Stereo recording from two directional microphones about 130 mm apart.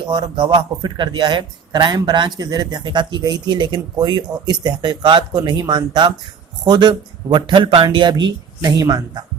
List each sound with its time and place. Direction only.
0.1 s a man's voice: 40° right (ahead or behind)